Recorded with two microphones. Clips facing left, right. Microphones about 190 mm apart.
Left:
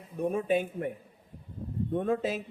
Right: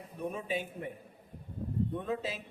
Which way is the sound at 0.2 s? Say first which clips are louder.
Left 8 dB; 50° left (ahead or behind).